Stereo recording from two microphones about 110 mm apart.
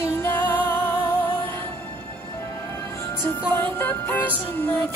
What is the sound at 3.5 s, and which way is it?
Music, 20° left (ahead or behind).